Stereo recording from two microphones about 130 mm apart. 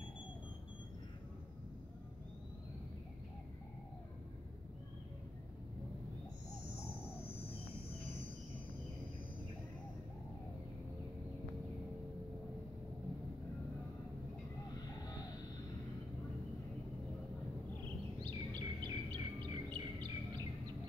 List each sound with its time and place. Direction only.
18.2 s chirp: 35° right (ahead or behind)